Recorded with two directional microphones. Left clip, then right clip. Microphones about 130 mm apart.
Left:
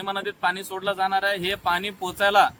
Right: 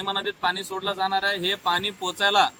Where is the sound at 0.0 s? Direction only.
35° left (ahead or behind).